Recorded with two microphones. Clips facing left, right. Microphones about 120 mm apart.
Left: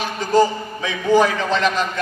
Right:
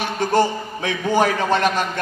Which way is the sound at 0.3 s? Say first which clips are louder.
Left 4 dB; 60° right (ahead or behind).